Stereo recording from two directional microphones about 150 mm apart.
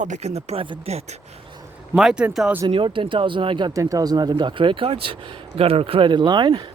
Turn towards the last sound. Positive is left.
turn(degrees=-30)  # may be behind; listen again after turning